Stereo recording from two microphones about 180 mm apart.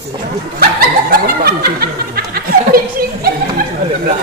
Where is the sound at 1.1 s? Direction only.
60° right (ahead or behind).